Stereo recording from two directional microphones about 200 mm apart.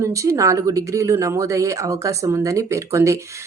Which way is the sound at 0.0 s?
15° right (ahead or behind).